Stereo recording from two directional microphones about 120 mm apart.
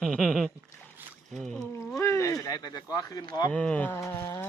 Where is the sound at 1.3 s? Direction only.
5° left (ahead or behind).